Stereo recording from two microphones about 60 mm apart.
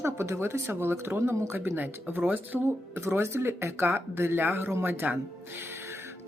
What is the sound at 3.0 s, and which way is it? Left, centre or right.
Speech, right.